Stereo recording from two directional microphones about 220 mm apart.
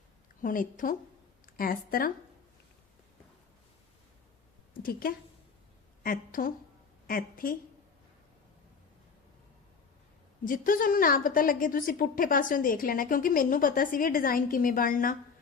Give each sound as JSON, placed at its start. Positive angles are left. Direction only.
{"t": 0.4, "sound": "a woman's voice", "side_deg": 40}
{"t": 4.7, "sound": "a woman's voice", "side_deg": 40}
{"t": 10.4, "sound": "a woman's voice", "side_deg": 40}